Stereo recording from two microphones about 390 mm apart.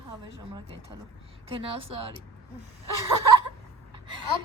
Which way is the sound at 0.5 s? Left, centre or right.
Centre.